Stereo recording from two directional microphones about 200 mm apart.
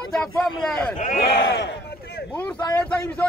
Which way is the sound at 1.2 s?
55° left (ahead or behind).